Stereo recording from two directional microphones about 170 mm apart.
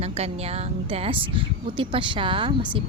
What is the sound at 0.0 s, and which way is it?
Speech, 35° right (ahead or behind).